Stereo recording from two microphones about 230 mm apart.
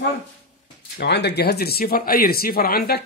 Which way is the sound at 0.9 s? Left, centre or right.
Left.